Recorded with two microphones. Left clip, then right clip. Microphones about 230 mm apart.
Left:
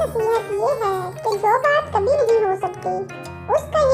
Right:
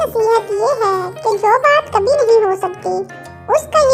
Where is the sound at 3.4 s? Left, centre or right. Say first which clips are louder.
Right 5 dB; right.